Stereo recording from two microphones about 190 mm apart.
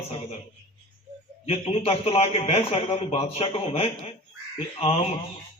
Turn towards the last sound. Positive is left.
turn(degrees=35)  # may be behind; listen again after turning